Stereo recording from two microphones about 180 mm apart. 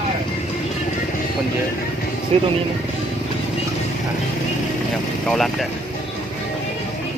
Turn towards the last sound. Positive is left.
turn(degrees=0)  # may be behind; listen again after turning